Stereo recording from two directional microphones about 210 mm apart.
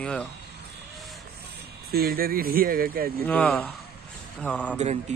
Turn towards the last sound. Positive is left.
turn(degrees=5)  # may be behind; listen again after turning